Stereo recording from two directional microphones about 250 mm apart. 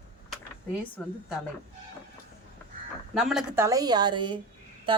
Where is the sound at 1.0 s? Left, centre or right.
Centre.